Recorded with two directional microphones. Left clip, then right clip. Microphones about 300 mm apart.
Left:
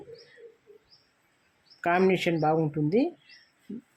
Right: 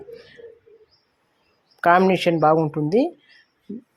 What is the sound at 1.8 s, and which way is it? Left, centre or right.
Speech, centre.